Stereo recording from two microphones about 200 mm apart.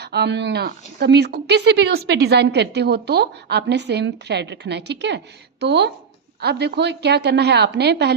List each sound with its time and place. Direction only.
0.0 s speech: 55° right (ahead or behind)